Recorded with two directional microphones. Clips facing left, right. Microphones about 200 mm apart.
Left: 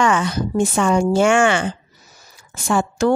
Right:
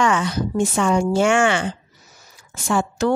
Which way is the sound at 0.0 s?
50° left (ahead or behind).